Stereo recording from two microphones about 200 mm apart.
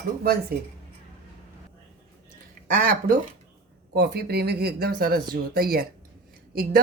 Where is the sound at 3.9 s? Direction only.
55° right (ahead or behind).